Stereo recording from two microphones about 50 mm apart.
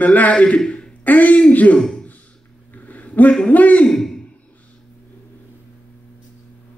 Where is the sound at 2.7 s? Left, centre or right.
Left.